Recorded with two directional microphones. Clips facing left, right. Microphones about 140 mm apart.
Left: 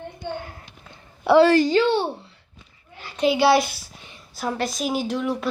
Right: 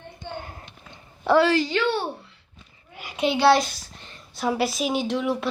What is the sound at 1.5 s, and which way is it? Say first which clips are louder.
Speech: left 5 dB; 50° left (ahead or behind).